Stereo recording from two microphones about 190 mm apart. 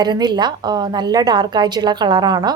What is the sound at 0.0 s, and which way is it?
A woman's voice, 20° right (ahead or behind).